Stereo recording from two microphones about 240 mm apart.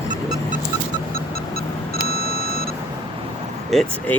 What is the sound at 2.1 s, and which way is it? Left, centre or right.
Beep, left.